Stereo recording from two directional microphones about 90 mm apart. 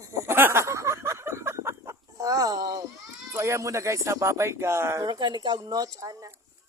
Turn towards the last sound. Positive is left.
turn(degrees=-40)  # may be behind; listen again after turning